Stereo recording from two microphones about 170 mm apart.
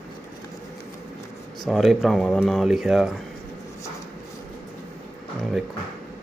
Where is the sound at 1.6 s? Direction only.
Centre (ahead or behind).